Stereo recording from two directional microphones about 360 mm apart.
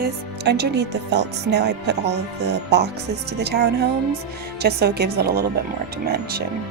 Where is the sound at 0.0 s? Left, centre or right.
Right.